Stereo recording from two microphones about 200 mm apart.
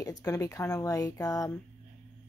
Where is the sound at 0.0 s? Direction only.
15° left (ahead or behind).